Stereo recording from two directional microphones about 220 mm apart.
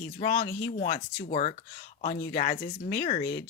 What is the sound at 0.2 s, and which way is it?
Speech, 25° left (ahead or behind).